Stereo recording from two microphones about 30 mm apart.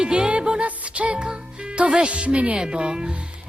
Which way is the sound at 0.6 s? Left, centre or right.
Right.